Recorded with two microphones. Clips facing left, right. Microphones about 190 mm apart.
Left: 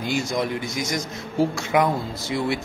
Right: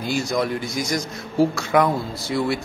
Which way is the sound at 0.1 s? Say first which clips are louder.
Right 2 dB; 20° left (ahead or behind).